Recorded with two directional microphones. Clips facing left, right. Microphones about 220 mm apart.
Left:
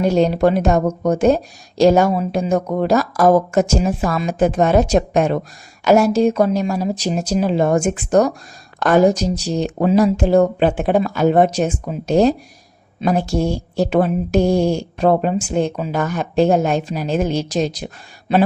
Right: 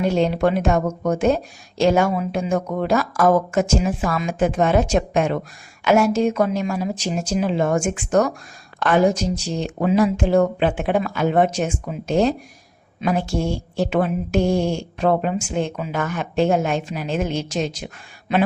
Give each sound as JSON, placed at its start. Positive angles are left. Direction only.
{"t": 0.0, "sound": "speech", "side_deg": 40}